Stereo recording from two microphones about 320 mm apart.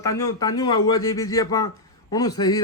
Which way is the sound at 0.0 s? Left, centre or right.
Centre.